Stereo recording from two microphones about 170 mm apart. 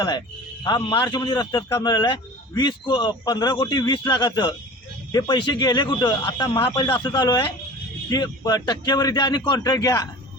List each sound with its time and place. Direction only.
0.6 s a man's voice: 25° left (ahead or behind)